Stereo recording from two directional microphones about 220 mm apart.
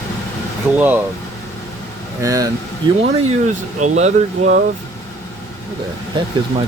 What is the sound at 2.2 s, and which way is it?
Speech, 15° right (ahead or behind).